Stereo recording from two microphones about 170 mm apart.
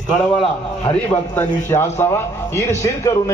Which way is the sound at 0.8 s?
10° left (ahead or behind).